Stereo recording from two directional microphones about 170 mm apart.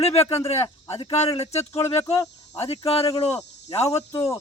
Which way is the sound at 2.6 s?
35° left (ahead or behind).